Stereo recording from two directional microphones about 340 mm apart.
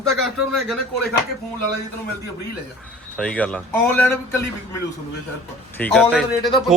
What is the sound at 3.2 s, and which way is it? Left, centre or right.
A man's voice, centre.